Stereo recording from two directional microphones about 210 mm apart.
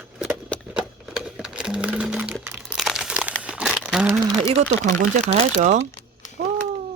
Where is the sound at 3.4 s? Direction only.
5° right (ahead or behind).